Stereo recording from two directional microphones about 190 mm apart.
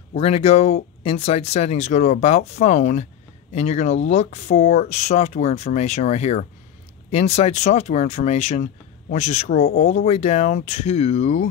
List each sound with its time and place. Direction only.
0.1 s speech: 30° left (ahead or behind)